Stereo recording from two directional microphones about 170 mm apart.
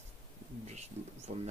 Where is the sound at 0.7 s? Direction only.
40° right (ahead or behind).